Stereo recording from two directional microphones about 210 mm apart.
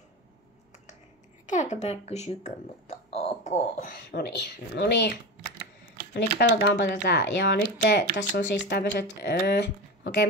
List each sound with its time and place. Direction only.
1.4 s speech: 35° left (ahead or behind)
4.1 s speech: 50° left (ahead or behind)
6.1 s speech: 55° left (ahead or behind)